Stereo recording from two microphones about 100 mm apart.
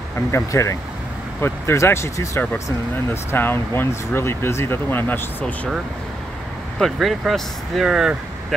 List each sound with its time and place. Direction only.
0.3 s speech: 30° left (ahead or behind)
6.8 s speech: centre (ahead or behind)